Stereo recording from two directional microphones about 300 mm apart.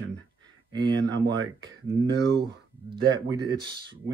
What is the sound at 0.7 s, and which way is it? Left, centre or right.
Speech, centre.